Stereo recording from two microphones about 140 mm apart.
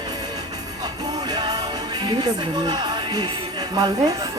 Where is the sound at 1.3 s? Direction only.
30° right (ahead or behind).